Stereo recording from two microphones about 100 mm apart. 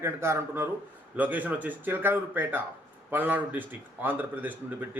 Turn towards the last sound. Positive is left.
turn(degrees=-15)  # may be behind; listen again after turning